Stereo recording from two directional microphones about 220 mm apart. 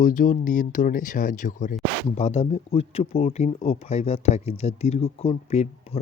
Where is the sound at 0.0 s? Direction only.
35° left (ahead or behind).